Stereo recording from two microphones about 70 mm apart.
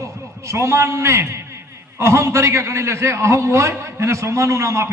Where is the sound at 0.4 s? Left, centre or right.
Right.